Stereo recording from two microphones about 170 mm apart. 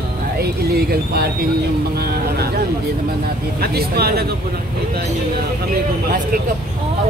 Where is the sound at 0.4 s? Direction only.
65° right (ahead or behind).